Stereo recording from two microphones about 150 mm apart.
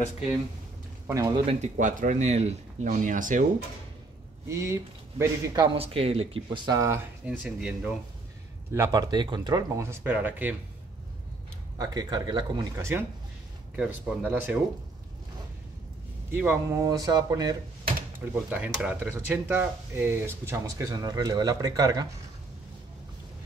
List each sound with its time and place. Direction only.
1.0 s speech: 20° right (ahead or behind)
1.4 s speech: 40° right (ahead or behind)
1.8 s speech: 60° right (ahead or behind)
4.5 s speech: 20° right (ahead or behind)
5.8 s speech: 40° right (ahead or behind)
6.8 s speech: 20° right (ahead or behind)
7.2 s speech: 5° right (ahead or behind)
8.7 s speech: 25° right (ahead or behind)
11.8 s speech: 25° right (ahead or behind)
12.7 s speech: 15° right (ahead or behind)
16.3 s speech: 15° right (ahead or behind)
16.8 s speech: 25° right (ahead or behind)
18.2 s speech: 10° right (ahead or behind); by 22.0 s 25° right (ahead or behind)